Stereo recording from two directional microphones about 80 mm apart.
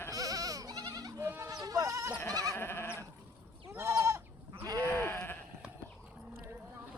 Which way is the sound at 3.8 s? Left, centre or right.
Right.